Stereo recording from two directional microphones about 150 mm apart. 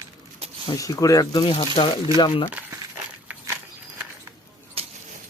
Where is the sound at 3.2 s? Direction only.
15° right (ahead or behind).